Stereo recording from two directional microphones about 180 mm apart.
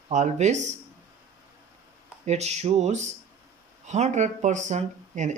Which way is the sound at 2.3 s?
35° right (ahead or behind).